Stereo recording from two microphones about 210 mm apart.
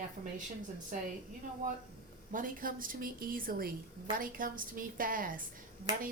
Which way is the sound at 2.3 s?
40° right (ahead or behind).